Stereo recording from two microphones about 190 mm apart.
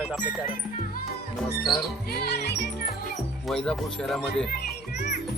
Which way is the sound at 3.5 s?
5° left (ahead or behind).